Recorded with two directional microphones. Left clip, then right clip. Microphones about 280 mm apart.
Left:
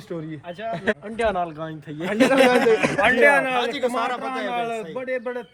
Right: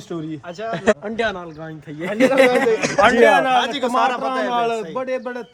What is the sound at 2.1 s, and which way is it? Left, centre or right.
Speech, left.